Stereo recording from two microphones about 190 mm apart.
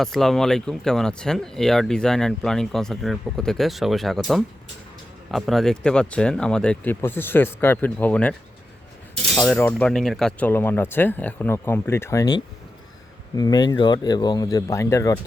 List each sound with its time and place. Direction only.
0.0 s speech: centre (ahead or behind)